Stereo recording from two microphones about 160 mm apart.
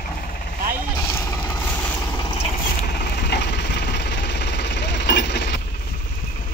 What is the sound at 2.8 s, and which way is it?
Engine, 90° left.